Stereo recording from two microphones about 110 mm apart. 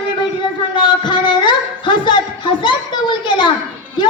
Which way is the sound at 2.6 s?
45° left (ahead or behind).